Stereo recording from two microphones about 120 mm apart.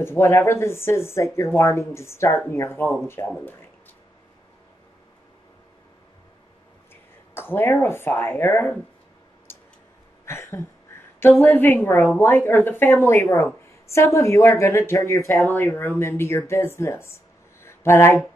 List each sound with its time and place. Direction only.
0.0 s speech: 20° left (ahead or behind)
7.3 s speech: 20° left (ahead or behind)
10.2 s a sound: 20° left (ahead or behind)
11.1 s speech: 20° left (ahead or behind)